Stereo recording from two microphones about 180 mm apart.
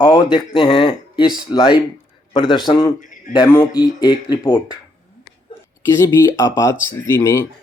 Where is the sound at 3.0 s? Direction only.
45° left (ahead or behind).